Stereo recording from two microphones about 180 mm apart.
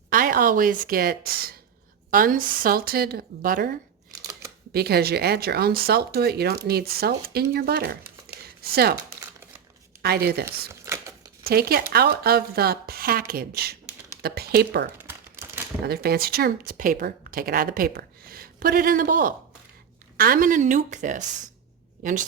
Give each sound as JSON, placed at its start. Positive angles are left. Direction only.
{"t": 0.1, "sound": "a woman's voice", "side_deg": -50}
{"t": 8.3, "sound": "a sound", "side_deg": -60}
{"t": 10.0, "sound": "speech", "side_deg": -60}
{"t": 10.7, "sound": "crumpling", "side_deg": -15}
{"t": 11.4, "sound": "a woman's voice", "side_deg": -60}